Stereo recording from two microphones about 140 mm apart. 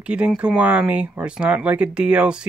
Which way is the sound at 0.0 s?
10° right (ahead or behind).